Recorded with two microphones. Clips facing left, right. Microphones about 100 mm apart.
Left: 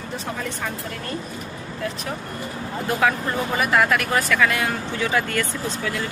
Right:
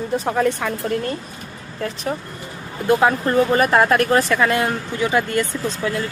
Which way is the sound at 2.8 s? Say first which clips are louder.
Right 5 dB; 25° right (ahead or behind).